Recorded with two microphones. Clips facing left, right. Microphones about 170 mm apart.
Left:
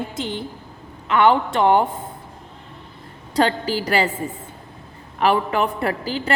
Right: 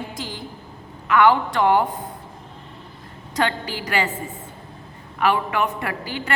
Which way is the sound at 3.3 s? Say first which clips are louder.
Left 5 dB; 35° left (ahead or behind).